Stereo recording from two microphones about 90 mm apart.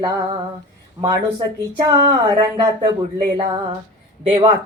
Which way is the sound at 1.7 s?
55° right (ahead or behind).